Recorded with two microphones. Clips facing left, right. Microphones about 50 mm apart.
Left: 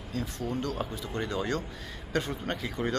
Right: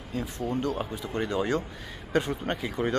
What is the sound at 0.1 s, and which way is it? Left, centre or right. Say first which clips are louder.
Speech: right 3 dB; centre.